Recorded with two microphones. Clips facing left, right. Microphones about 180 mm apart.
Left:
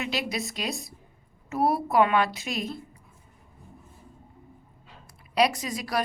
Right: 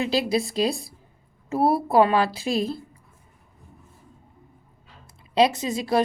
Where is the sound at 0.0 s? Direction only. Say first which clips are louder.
Right 8 dB; 30° right (ahead or behind).